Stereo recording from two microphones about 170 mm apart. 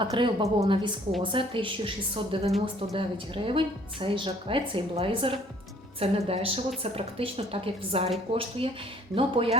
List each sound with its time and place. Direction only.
0.0 s a woman's voice: 25° right (ahead or behind)